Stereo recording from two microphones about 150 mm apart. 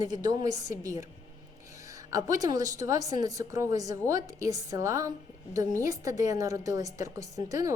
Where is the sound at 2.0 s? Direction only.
20° right (ahead or behind).